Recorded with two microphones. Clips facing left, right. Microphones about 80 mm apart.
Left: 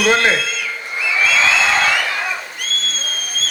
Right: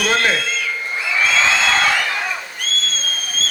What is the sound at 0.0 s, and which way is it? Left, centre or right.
Speech, left.